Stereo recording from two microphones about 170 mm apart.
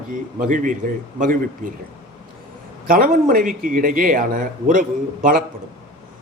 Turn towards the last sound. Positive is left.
turn(degrees=-55)  # may be behind; listen again after turning